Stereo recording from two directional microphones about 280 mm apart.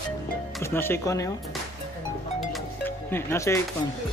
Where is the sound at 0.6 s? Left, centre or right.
Centre.